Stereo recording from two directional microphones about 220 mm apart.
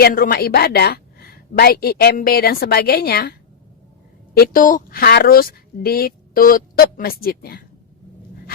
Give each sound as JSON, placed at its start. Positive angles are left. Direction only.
{"t": 0.0, "sound": "a woman's voice", "side_deg": 40}
{"t": 4.4, "sound": "a woman's voice", "side_deg": 40}